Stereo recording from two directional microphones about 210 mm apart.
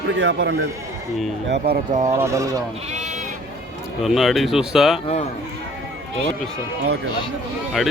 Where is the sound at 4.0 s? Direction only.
Centre (ahead or behind).